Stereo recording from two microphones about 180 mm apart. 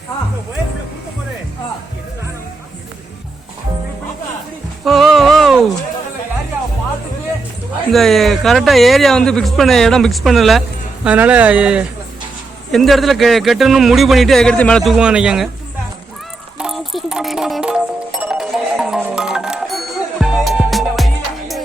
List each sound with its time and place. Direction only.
4.9 s a sound: centre (ahead or behind)
7.9 s speech: centre (ahead or behind)
16.6 s music: centre (ahead or behind)